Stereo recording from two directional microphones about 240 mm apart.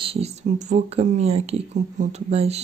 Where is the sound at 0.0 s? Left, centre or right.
Right.